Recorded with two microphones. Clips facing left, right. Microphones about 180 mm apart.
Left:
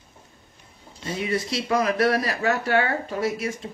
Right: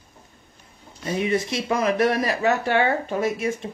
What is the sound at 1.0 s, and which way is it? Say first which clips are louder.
Speech: right 3 dB; 25° right (ahead or behind).